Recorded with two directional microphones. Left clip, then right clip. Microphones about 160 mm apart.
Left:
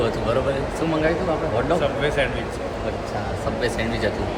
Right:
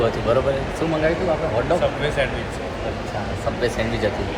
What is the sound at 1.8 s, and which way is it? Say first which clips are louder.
Speech: even; 20° left (ahead or behind).